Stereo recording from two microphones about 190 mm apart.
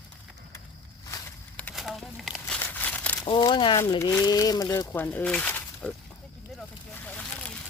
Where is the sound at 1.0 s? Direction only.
15° left (ahead or behind).